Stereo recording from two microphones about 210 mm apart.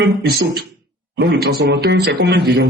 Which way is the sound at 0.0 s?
50° right (ahead or behind).